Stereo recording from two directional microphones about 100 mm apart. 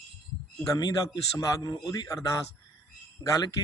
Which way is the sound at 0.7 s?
35° left (ahead or behind).